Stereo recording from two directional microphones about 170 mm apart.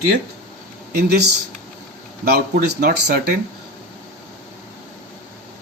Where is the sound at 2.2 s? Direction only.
70° right (ahead or behind).